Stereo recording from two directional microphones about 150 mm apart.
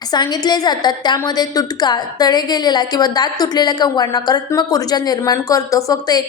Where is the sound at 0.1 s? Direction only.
30° left (ahead or behind).